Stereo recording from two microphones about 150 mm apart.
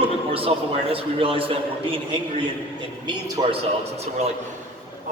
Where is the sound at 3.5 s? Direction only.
45° right (ahead or behind).